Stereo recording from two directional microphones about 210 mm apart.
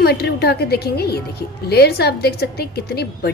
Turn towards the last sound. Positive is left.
turn(degrees=50)  # may be behind; listen again after turning